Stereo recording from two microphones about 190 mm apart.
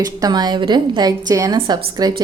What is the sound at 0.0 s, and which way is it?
A woman's voice, 20° right (ahead or behind).